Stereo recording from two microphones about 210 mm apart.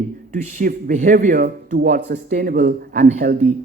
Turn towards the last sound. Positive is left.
turn(degrees=-40)  # may be behind; listen again after turning